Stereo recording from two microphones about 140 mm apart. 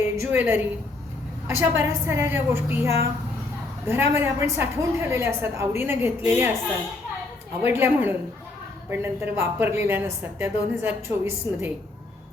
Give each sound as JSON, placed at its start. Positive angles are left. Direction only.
{"t": 0.2, "sound": "speech", "side_deg": -15}
{"t": 7.6, "sound": "speech", "side_deg": -15}